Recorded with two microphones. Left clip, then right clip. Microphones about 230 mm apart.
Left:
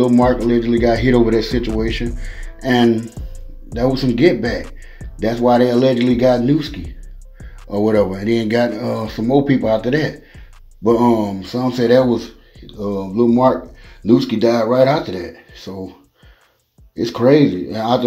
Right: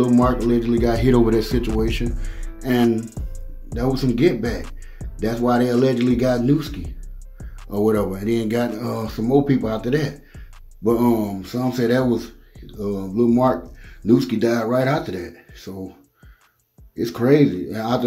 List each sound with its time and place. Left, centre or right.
0.5 s speech: centre
2.1 s music: centre
3.7 s speech: centre
16.9 s speech: centre